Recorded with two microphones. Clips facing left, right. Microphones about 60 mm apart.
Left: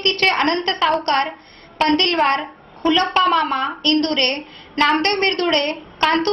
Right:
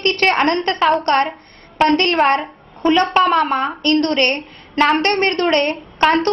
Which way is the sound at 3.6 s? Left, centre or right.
Right.